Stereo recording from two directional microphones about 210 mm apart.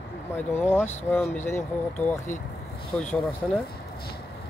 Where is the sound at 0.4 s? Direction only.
10° left (ahead or behind).